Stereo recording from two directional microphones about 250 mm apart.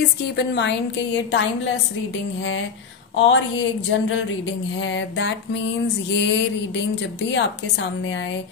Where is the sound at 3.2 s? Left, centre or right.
Left.